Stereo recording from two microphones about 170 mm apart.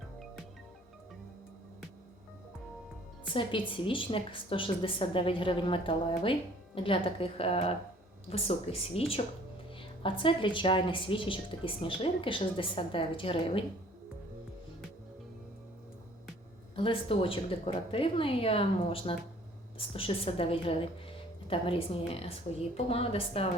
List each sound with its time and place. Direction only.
3.8 s a woman's voice: 30° left (ahead or behind)
16.7 s a woman's voice: 30° left (ahead or behind)